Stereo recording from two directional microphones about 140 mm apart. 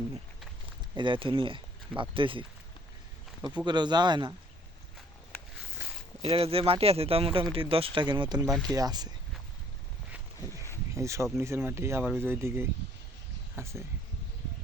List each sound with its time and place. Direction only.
0.9 s speech: 35° right (ahead or behind)
6.2 s speech: 45° right (ahead or behind)
8.4 s speech: 5° left (ahead or behind)
8.7 s speech: 25° right (ahead or behind)
10.9 s speech: 20° right (ahead or behind)